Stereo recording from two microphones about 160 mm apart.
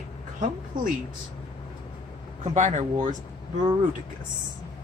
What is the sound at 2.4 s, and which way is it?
Speech, 50° right (ahead or behind).